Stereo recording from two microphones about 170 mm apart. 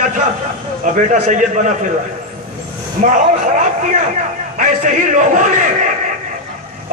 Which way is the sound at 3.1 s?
50° right (ahead or behind).